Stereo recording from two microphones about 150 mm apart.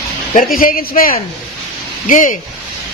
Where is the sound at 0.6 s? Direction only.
70° left (ahead or behind).